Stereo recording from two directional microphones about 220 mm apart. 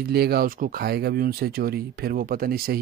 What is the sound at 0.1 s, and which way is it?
Speech, 45° right (ahead or behind).